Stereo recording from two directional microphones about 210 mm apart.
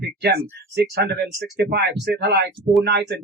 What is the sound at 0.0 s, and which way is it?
Speech, 50° right (ahead or behind).